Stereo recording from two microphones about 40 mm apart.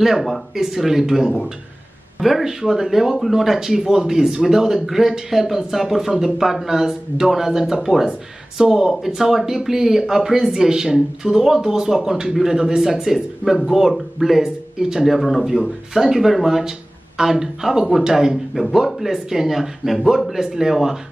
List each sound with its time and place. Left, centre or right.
0.0 s speech: centre
2.4 s speech: centre
14.4 s speech: centre
15.0 s speech: centre